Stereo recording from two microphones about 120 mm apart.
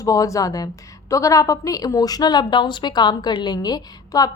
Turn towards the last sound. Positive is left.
turn(degrees=30)  # may be behind; listen again after turning